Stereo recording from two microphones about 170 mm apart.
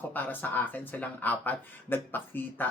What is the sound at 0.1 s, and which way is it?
Speech, 10° left (ahead or behind).